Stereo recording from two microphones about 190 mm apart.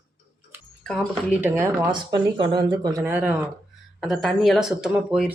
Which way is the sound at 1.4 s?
10° right (ahead or behind).